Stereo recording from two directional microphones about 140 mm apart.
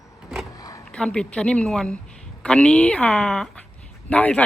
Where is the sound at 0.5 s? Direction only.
25° left (ahead or behind).